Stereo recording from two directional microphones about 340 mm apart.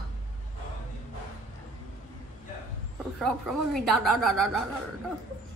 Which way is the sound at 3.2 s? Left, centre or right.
Centre.